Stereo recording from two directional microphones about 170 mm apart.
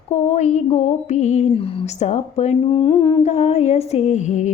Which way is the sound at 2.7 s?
25° left (ahead or behind).